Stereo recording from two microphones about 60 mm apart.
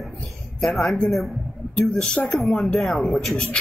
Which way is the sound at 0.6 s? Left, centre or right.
Centre.